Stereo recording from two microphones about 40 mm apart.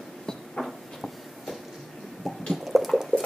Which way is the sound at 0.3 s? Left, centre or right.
Centre.